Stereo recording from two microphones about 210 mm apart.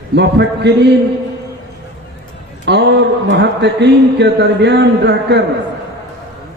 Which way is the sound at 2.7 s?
55° right (ahead or behind).